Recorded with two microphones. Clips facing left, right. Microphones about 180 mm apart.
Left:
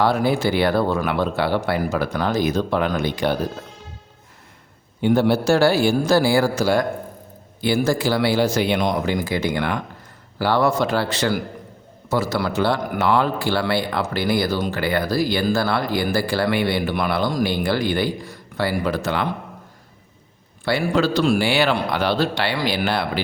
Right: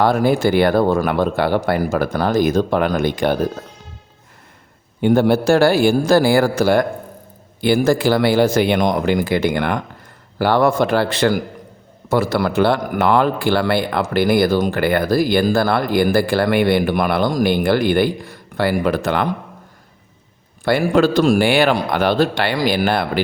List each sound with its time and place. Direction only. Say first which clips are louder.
0.0 s a man's voice: right 4 dB; 50° right (ahead or behind)
4.9 s a man's voice: right 3 dB; 50° right (ahead or behind)
20.7 s a man's voice: right 5 dB; 50° right (ahead or behind)